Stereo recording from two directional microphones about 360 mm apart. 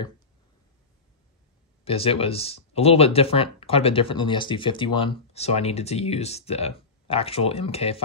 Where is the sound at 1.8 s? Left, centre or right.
Centre.